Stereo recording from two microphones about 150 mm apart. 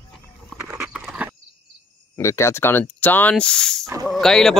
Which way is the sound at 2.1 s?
20° left (ahead or behind).